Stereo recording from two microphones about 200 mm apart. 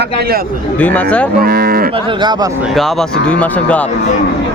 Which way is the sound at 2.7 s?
Centre (ahead or behind).